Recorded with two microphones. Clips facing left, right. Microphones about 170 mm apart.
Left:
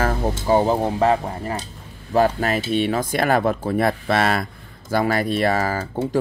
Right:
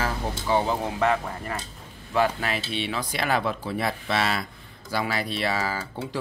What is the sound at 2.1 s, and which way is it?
Speech, 40° left (ahead or behind).